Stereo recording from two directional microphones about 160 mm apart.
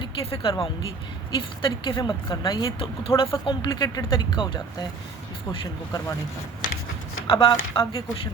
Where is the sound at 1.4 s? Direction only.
30° left (ahead or behind).